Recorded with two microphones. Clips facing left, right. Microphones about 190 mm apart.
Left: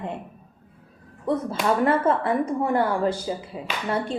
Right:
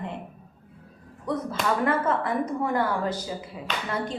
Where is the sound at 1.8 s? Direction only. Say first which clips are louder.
Left 5 dB; 30° left (ahead or behind).